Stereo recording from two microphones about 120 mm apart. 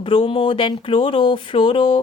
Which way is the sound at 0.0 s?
45° left (ahead or behind).